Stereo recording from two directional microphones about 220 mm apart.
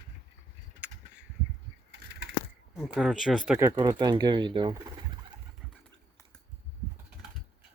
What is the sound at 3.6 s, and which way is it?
Speech, 15° right (ahead or behind).